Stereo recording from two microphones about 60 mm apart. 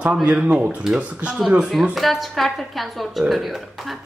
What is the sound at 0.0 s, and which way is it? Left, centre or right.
Speech, centre.